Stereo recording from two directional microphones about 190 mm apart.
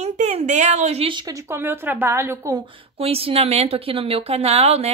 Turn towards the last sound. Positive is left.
turn(degrees=-35)  # may be behind; listen again after turning